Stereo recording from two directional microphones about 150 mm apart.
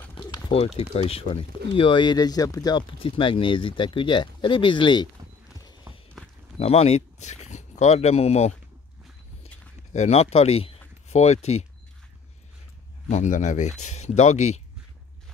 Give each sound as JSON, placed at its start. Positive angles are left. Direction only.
{"t": 0.1, "sound": "a sound", "side_deg": 30}
{"t": 0.5, "sound": "speech", "side_deg": 40}
{"t": 6.6, "sound": "speech", "side_deg": 45}
{"t": 9.9, "sound": "speech", "side_deg": 45}
{"t": 13.1, "sound": "speech", "side_deg": 55}